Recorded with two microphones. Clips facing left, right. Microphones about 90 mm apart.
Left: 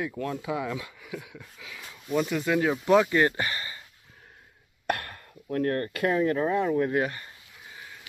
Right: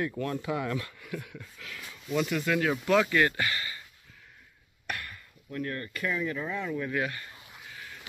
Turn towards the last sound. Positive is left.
turn(degrees=15)  # may be behind; listen again after turning